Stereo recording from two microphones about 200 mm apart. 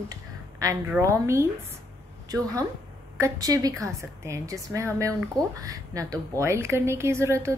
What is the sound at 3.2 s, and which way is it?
A woman's voice, 20° right (ahead or behind).